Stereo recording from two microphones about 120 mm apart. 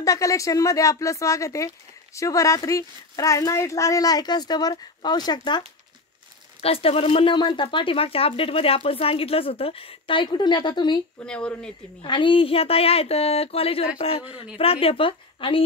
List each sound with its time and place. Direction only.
0.0 s speech: 25° left (ahead or behind)
6.6 s speech: 55° left (ahead or behind)
11.2 s speech: 10° left (ahead or behind)
12.0 s speech: 45° left (ahead or behind)